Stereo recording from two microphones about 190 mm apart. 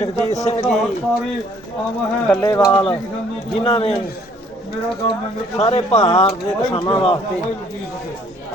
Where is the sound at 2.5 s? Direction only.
20° left (ahead or behind).